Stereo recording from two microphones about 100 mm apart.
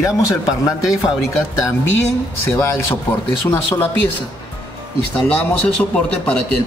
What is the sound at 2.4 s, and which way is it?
Speech, 25° left (ahead or behind).